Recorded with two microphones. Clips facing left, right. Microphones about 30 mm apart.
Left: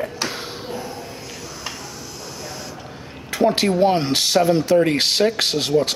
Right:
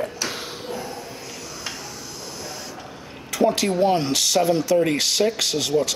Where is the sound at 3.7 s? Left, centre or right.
Left.